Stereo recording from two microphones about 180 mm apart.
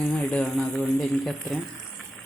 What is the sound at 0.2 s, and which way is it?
Speech, 5° left (ahead or behind).